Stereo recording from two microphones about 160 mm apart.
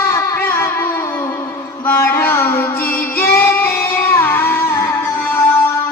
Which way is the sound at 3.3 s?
15° left (ahead or behind).